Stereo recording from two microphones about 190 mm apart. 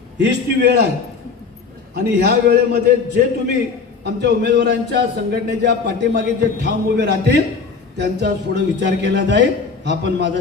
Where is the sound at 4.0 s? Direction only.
65° right (ahead or behind).